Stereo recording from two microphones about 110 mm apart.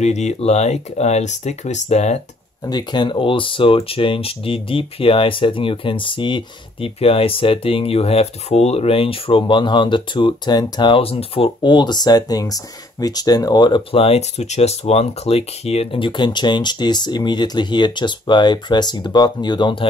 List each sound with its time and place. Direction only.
0.0 s speech: 90° left
2.6 s speech: 40° left (ahead or behind)
14.0 s speech: 75° left (ahead or behind); by 19.9 s 45° left (ahead or behind)